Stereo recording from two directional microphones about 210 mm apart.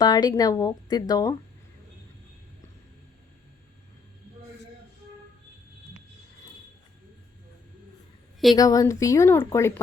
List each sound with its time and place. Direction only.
0.0 s speech: 20° left (ahead or behind)
8.5 s speech: 15° left (ahead or behind)